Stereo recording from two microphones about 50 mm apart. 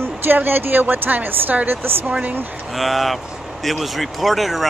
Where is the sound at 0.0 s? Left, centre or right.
Right.